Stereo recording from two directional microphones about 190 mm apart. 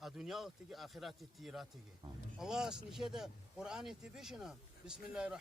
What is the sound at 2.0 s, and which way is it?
Speech, 25° right (ahead or behind).